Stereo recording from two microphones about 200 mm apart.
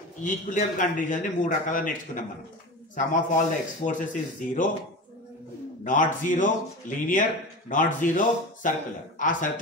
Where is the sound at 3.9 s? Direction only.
40° left (ahead or behind).